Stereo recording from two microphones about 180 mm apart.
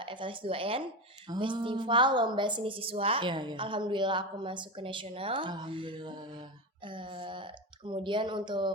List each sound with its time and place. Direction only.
0.0 s a woman's voice: 30° right (ahead or behind)